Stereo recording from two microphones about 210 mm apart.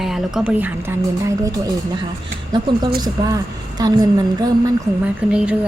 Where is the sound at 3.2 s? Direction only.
15° right (ahead or behind).